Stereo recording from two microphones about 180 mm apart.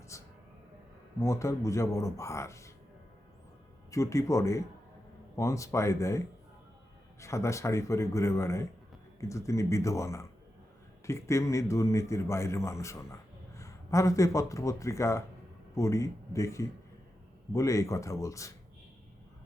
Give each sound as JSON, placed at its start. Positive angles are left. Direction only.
{"t": 0.1, "sound": "vehicle", "side_deg": 15}
{"t": 1.2, "sound": "a man's voice", "side_deg": 15}
{"t": 3.9, "sound": "a man's voice", "side_deg": 15}